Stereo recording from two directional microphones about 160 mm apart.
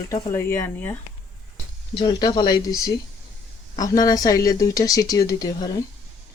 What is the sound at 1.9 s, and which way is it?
Speech, 30° left (ahead or behind).